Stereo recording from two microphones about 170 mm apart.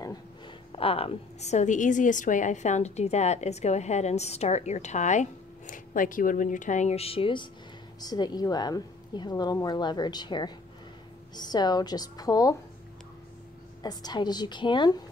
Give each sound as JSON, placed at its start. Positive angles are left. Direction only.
{"t": 0.7, "sound": "a woman's voice", "side_deg": 35}
{"t": 13.8, "sound": "a woman's voice", "side_deg": 25}